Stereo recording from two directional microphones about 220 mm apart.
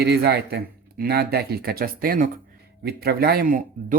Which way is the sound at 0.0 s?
50° right (ahead or behind).